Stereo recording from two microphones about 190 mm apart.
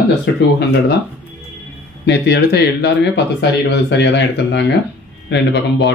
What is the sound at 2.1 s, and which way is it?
Speech, 65° left (ahead or behind).